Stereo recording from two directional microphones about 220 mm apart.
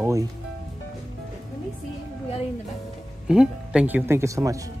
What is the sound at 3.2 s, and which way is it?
Speech, 5° right (ahead or behind).